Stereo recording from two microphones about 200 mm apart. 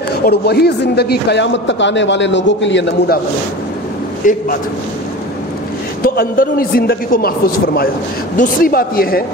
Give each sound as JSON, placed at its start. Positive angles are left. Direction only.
{"t": 0.2, "sound": "speech", "side_deg": 50}
{"t": 6.0, "sound": "a man's voice", "side_deg": 45}